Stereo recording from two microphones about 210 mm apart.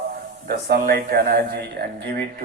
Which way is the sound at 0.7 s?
45° right (ahead or behind).